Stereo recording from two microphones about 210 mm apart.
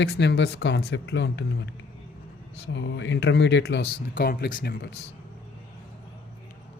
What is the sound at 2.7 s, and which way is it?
Speech, 60° left (ahead or behind).